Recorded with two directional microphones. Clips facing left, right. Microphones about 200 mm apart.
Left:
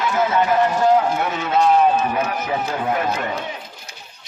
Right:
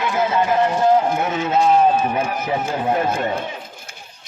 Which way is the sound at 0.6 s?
20° right (ahead or behind).